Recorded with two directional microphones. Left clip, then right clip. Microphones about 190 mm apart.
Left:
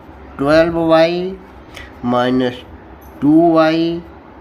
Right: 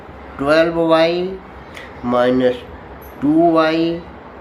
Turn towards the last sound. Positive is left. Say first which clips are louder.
# left 2 dB
turn(degrees=55)  # may be behind; listen again after turning